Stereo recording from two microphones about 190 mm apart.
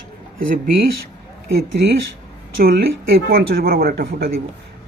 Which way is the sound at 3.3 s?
50° right (ahead or behind).